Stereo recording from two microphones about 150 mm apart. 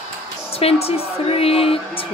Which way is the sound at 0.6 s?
40° left (ahead or behind).